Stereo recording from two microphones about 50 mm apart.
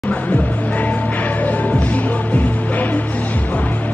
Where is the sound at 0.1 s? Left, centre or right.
Left.